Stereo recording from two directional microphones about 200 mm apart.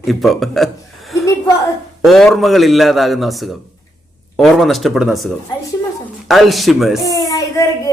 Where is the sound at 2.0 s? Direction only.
Centre (ahead or behind).